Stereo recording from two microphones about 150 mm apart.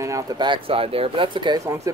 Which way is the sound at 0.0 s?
25° right (ahead or behind).